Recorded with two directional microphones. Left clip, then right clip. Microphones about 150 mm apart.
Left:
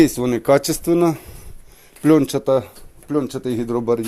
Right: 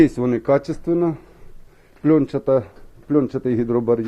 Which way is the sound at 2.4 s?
10° left (ahead or behind).